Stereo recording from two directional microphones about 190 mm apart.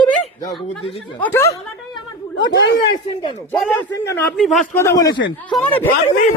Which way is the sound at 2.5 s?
70° left (ahead or behind).